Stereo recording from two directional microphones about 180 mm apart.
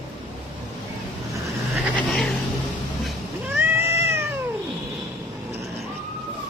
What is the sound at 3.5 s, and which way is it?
Cat, 15° right (ahead or behind).